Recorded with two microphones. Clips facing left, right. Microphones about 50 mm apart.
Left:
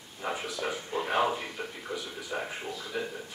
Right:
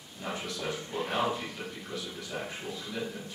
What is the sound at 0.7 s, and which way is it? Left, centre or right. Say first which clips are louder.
Speech: left 2 dB; centre.